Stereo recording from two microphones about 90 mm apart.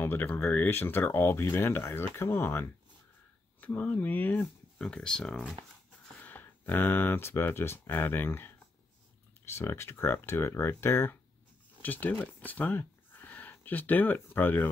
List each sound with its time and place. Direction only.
0.0 s speech: 20° left (ahead or behind)
4.7 s speech: 10° left (ahead or behind)